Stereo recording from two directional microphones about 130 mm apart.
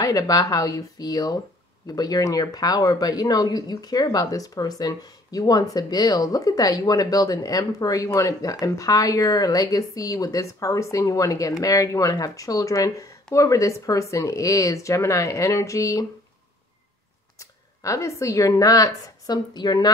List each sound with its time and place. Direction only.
0.0 s speech: 25° left (ahead or behind)
17.4 s speech: 25° left (ahead or behind)